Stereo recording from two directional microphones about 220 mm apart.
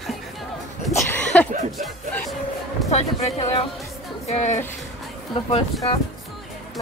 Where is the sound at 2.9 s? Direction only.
30° left (ahead or behind).